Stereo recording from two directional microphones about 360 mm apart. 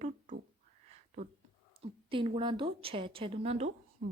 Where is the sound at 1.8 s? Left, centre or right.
Centre.